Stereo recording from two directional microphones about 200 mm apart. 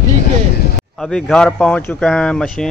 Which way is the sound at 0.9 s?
Centre (ahead or behind).